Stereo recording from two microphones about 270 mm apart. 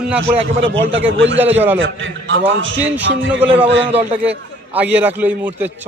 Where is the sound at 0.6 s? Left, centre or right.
Right.